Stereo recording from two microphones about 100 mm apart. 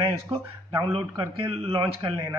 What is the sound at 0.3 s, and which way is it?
Speech, 55° right (ahead or behind).